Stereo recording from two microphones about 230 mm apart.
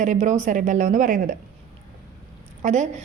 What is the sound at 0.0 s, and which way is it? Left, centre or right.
A woman's voice, right.